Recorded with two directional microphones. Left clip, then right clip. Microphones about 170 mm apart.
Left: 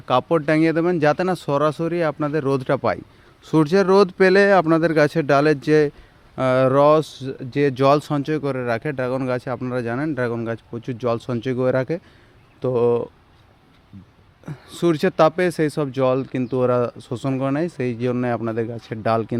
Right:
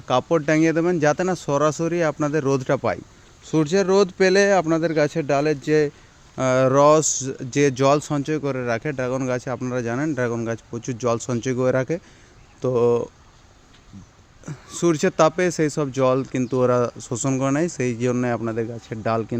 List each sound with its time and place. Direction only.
0.0 s speech: centre (ahead or behind)
3.4 s speech: 20° left (ahead or behind)
6.3 s speech: centre (ahead or behind)
14.4 s speech: centre (ahead or behind)